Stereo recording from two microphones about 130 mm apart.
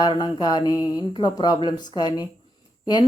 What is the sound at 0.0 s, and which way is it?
Speech, 30° left (ahead or behind).